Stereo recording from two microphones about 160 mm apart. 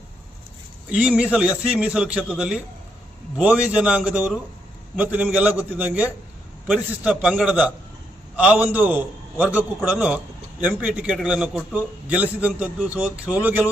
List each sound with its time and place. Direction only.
0.9 s a man's voice: 10° right (ahead or behind)